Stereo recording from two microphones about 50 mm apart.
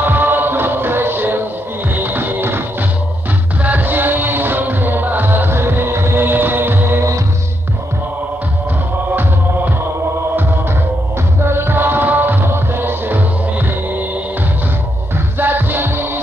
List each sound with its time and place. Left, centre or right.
0.0 s music: right
3.6 s music: right
11.4 s music: right
15.3 s music: right